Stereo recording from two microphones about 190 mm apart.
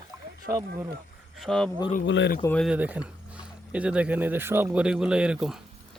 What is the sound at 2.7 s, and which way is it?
Speech, 5° right (ahead or behind).